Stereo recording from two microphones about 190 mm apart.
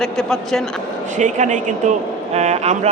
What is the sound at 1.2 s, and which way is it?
A man's voice, 40° right (ahead or behind).